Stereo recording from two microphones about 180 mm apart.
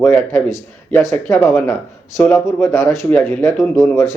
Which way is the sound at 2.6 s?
15° left (ahead or behind).